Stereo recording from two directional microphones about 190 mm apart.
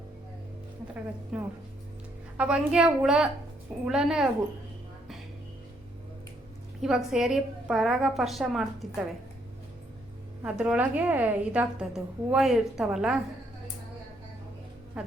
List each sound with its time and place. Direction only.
1.3 s a woman's voice: 5° right (ahead or behind)
6.8 s a woman's voice: 5° right (ahead or behind)
10.4 s a woman's voice: 5° right (ahead or behind)
15.0 s speech: 5° right (ahead or behind)